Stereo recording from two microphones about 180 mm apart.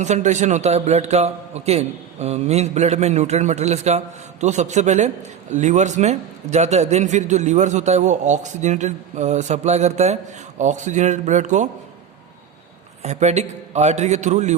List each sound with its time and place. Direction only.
0.0 s a man's voice: 40° right (ahead or behind)
13.0 s a man's voice: 40° right (ahead or behind)